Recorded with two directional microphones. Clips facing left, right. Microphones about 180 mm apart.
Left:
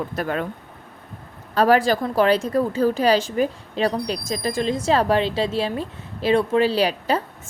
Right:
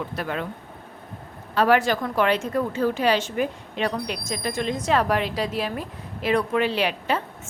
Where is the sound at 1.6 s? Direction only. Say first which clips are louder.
Left 3 dB; 35° left (ahead or behind).